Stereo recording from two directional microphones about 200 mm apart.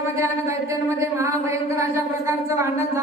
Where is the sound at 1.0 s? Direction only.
15° right (ahead or behind).